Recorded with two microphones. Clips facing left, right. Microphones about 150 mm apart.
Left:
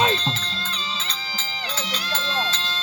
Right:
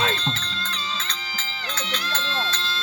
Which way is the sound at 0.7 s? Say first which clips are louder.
Even; 15° left (ahead or behind).